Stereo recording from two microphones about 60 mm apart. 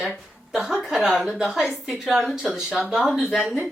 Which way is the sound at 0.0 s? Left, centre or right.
Centre.